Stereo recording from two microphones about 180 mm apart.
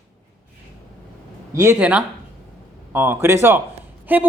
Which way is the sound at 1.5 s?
15° right (ahead or behind).